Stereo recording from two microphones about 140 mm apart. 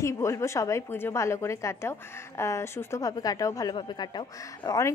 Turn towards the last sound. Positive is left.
turn(degrees=30)  # may be behind; listen again after turning